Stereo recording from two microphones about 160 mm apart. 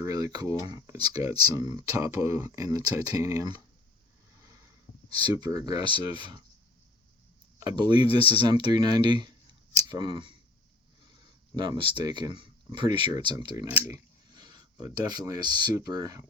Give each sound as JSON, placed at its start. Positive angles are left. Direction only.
{"t": 0.0, "sound": "speech", "side_deg": -20}
{"t": 4.4, "sound": "a sound", "side_deg": -20}
{"t": 5.0, "sound": "speech", "side_deg": -25}
{"t": 7.6, "sound": "speech", "side_deg": -30}
{"t": 13.7, "sound": "speech", "side_deg": -15}